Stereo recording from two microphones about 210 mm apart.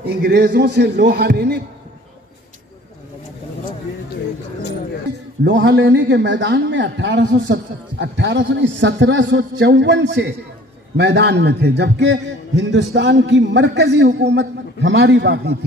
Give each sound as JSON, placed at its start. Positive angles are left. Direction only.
{"t": 0.0, "sound": "a man's voice", "side_deg": -50}
{"t": 5.4, "sound": "a man's voice", "side_deg": -55}